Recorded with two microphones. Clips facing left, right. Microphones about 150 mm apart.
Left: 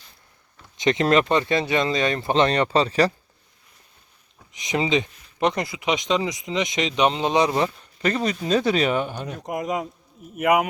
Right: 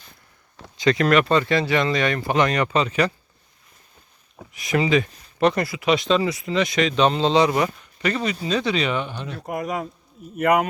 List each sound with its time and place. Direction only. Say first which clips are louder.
0.8 s speech: right 1 dB; 20° left (ahead or behind)
4.5 s speech: right 2 dB; 20° left (ahead or behind)
7.8 s speech: left 1 dB; 35° left (ahead or behind)
9.5 s speech: even; 20° left (ahead or behind)